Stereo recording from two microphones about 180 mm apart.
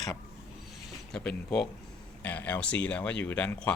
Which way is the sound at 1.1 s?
5° left (ahead or behind).